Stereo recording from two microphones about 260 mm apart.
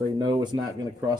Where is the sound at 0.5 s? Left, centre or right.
Centre.